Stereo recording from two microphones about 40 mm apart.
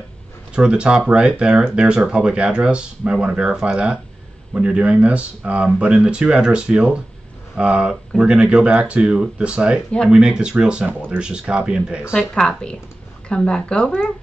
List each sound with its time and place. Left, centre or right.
0.6 s speech: right
12.4 s speech: centre